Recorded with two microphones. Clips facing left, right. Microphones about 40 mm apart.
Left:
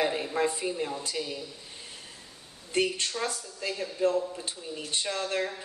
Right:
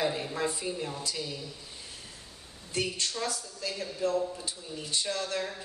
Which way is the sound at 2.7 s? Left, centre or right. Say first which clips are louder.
Left 4 dB; left.